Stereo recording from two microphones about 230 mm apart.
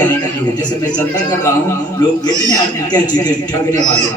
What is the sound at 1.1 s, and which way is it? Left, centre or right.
A man's voice, centre.